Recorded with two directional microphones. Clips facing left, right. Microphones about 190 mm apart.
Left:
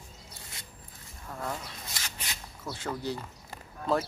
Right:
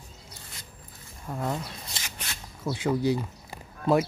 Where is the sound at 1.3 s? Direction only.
25° right (ahead or behind).